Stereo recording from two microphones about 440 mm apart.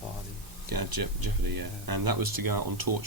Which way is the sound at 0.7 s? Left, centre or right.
Right.